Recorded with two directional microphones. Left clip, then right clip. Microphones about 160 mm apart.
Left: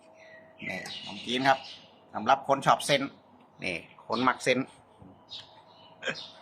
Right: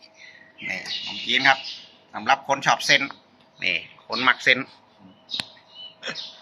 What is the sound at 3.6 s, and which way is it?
Speech, 15° left (ahead or behind).